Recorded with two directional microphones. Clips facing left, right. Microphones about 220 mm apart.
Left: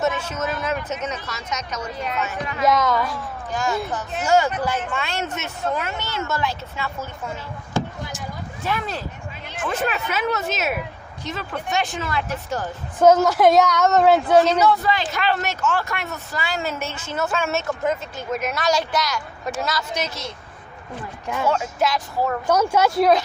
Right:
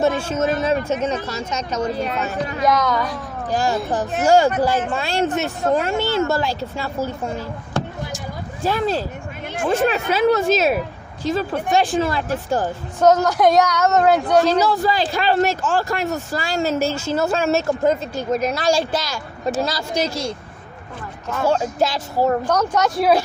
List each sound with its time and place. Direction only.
0.0 s speech: 30° right (ahead or behind)
2.6 s a woman's voice: centre (ahead or behind)
3.4 s speech: 35° right (ahead or behind)
4.0 s speech: 55° right (ahead or behind)
4.9 s speech: 35° right (ahead or behind)
8.6 s speech: 35° right (ahead or behind)
13.0 s a woman's voice: centre (ahead or behind)
14.6 s speech: 35° right (ahead or behind)
16.1 s speech: 45° right (ahead or behind)
21.4 s speech: 30° right (ahead or behind)
22.4 s speech: 10° left (ahead or behind)